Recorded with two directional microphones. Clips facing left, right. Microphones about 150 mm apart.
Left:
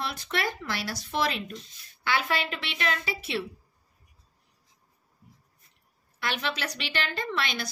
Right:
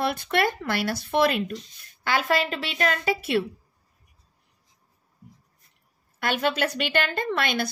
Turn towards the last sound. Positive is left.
turn(degrees=-55)  # may be behind; listen again after turning